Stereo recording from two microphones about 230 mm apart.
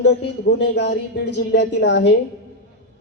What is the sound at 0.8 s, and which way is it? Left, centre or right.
A man's voice, left.